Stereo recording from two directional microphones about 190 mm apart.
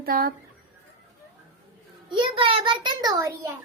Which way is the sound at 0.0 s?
50° right (ahead or behind).